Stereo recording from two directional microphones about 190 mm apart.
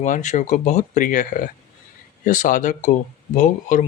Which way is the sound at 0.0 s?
40° left (ahead or behind).